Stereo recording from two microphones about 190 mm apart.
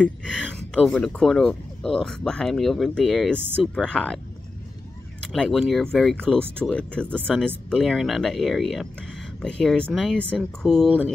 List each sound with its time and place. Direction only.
0.0 s speech: 5° left (ahead or behind)
5.3 s speech: centre (ahead or behind)